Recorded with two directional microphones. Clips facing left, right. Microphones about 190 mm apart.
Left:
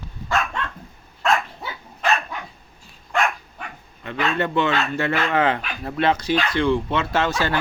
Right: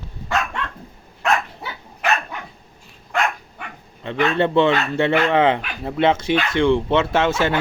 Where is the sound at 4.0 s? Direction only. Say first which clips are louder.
Right 5 dB; 25° right (ahead or behind).